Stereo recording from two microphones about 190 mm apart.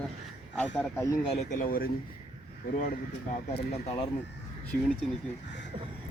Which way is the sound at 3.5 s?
30° left (ahead or behind).